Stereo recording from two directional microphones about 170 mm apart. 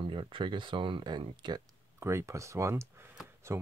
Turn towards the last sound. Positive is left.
turn(degrees=-15)  # may be behind; listen again after turning